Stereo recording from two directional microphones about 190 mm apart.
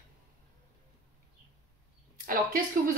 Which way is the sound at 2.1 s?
50° right (ahead or behind).